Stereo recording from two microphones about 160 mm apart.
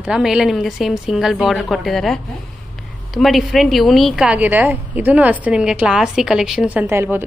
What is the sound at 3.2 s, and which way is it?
A woman's voice, centre (ahead or behind).